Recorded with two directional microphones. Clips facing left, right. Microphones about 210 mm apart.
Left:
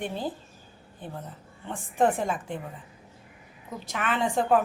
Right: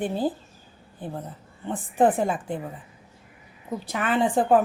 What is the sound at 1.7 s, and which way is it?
Speech, 35° right (ahead or behind).